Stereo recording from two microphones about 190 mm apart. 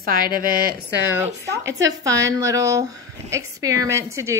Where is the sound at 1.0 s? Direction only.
15° right (ahead or behind).